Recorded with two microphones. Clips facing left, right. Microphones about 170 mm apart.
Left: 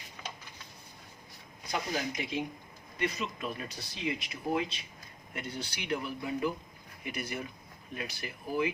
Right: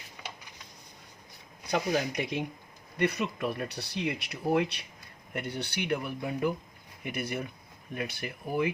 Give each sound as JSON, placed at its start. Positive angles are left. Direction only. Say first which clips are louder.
{"t": 1.7, "sound": "speech", "louder": "right 6 dB", "side_deg": -65}